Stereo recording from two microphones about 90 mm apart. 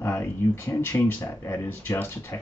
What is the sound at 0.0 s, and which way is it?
Speech, 30° left (ahead or behind).